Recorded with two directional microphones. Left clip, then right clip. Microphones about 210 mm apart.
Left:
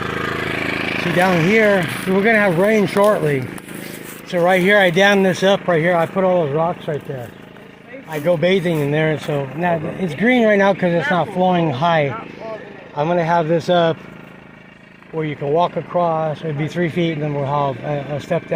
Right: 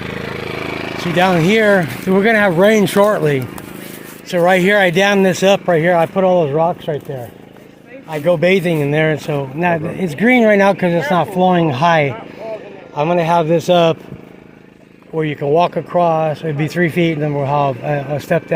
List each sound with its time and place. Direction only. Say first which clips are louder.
0.0 s vehicle: left 3 dB; 5° left (ahead or behind)
1.1 s speech: right 3 dB; 25° right (ahead or behind)
8.1 s speech: right 3 dB; 25° right (ahead or behind)
15.1 s speech: right 4 dB; 35° right (ahead or behind)